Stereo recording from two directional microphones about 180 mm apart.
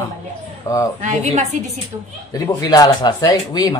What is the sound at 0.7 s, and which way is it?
Speech, 15° left (ahead or behind).